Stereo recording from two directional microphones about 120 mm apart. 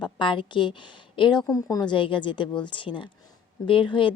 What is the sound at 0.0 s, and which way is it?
A woman's voice, 40° left (ahead or behind).